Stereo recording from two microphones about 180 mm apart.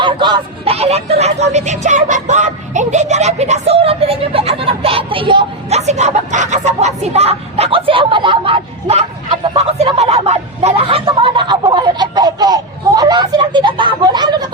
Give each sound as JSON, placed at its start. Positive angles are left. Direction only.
{"t": 0.0, "sound": "speech", "side_deg": -25}